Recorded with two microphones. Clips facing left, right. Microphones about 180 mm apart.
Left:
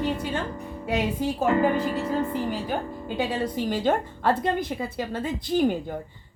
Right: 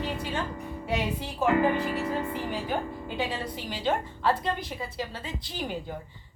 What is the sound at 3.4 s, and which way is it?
A woman's voice, 45° left (ahead or behind).